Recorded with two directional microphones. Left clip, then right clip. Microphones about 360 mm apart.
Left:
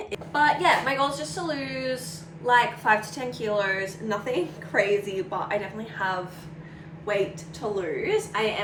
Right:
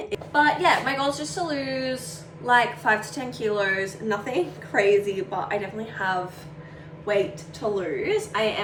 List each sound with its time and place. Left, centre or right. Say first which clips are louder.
0.1 s a woman's voice: right 1 dB; centre
7.8 s a woman's voice: left 1 dB; centre